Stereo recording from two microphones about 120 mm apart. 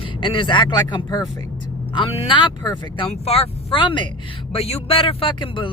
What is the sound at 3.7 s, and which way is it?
Speech, 40° left (ahead or behind).